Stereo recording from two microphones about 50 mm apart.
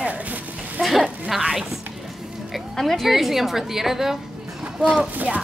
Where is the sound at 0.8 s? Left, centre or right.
Centre.